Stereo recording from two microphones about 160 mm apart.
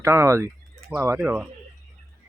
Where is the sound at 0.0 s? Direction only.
15° right (ahead or behind).